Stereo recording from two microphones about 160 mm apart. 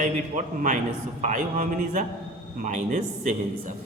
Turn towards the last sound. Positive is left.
turn(degrees=-50)  # may be behind; listen again after turning